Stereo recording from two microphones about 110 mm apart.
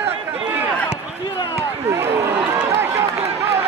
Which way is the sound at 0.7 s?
15° left (ahead or behind).